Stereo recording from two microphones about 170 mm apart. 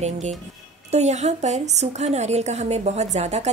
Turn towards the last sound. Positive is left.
turn(degrees=-40)  # may be behind; listen again after turning